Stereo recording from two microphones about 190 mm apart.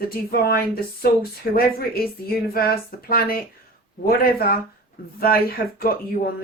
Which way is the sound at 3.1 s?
50° left (ahead or behind).